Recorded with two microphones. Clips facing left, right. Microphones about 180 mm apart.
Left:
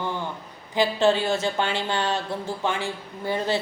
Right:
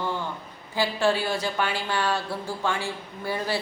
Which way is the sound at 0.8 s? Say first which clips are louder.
Left 3 dB; 20° left (ahead or behind).